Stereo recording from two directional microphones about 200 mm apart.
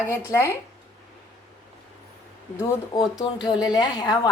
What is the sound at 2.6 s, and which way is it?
A woman's voice, 15° left (ahead or behind).